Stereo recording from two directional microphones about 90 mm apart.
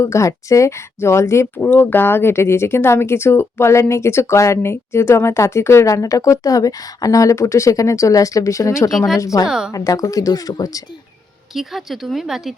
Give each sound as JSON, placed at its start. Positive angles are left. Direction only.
{"t": 0.0, "sound": "speech", "side_deg": 35}
{"t": 8.9, "sound": "speech", "side_deg": 0}
{"t": 9.1, "sound": "speech", "side_deg": 40}
{"t": 11.5, "sound": "speech", "side_deg": 0}